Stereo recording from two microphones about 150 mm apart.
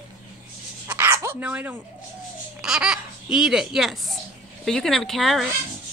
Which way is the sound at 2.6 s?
5° right (ahead or behind).